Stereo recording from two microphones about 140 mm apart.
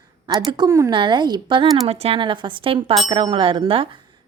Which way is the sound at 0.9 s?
35° right (ahead or behind).